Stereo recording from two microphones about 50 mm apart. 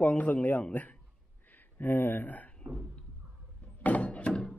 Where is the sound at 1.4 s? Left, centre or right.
Left.